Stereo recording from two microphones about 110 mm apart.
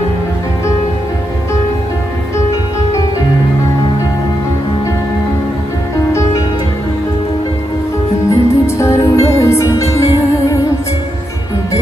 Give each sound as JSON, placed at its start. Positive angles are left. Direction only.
{"t": 8.3, "sound": "music", "side_deg": 25}